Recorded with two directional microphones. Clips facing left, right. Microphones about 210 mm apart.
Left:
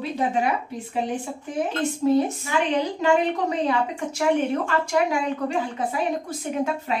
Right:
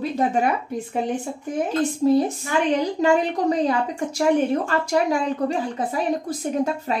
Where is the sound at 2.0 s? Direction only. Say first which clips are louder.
Right 1 dB; 35° right (ahead or behind).